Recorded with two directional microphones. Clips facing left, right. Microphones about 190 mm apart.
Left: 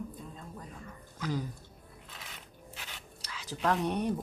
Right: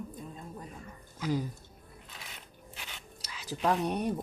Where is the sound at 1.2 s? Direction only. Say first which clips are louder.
Right 3 dB; 10° right (ahead or behind).